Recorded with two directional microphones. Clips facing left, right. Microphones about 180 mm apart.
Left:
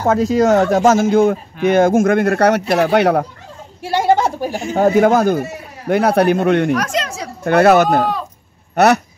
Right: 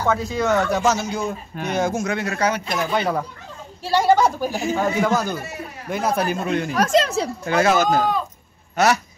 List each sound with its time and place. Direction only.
0.4 s speech: 45° left (ahead or behind); by 3.3 s 70° left (ahead or behind)
3.9 s a sound: 25° left (ahead or behind)
4.7 s a man's voice: 50° left (ahead or behind)
6.8 s speech: 30° right (ahead or behind)
7.4 s a man's voice: 65° left (ahead or behind)